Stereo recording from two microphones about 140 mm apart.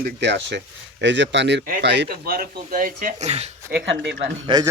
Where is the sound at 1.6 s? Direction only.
90° right.